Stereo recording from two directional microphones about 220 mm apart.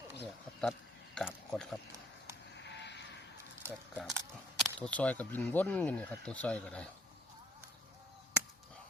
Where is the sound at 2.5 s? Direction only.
50° left (ahead or behind).